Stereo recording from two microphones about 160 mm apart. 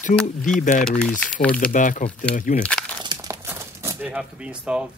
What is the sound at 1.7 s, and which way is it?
Speech, 55° left (ahead or behind).